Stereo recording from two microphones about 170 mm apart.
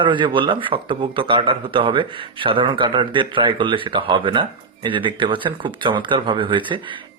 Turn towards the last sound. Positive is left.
turn(degrees=-30)  # may be behind; listen again after turning